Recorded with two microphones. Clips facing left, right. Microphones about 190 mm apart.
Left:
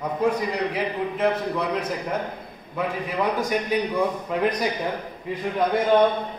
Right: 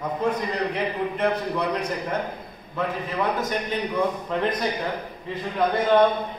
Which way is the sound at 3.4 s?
10° left (ahead or behind).